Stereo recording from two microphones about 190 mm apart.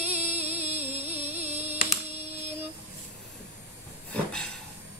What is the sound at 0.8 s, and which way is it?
Music, 35° right (ahead or behind).